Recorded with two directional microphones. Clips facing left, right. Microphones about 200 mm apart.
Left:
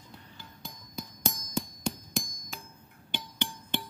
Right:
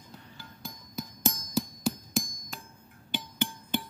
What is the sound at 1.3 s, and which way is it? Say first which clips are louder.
Hammer: right 3 dB; 5° right (ahead or behind).